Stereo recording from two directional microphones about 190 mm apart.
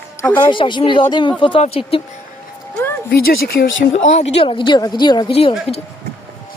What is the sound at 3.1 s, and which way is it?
Speech, 55° left (ahead or behind).